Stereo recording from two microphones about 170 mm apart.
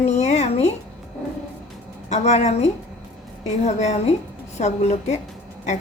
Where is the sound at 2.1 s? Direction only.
40° left (ahead or behind).